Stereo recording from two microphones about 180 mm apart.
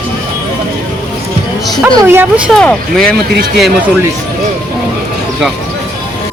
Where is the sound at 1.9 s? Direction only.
10° right (ahead or behind).